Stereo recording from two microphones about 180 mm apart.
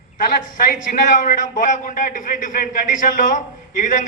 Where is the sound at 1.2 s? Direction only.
45° left (ahead or behind).